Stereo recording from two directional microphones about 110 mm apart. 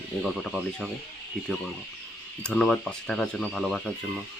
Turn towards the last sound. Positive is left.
turn(degrees=5)  # may be behind; listen again after turning